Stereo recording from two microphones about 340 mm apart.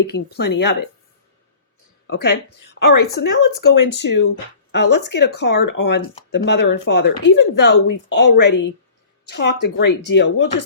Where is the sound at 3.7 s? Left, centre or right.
Left.